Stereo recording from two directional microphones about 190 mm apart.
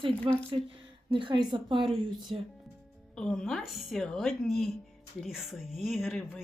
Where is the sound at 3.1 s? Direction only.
5° left (ahead or behind).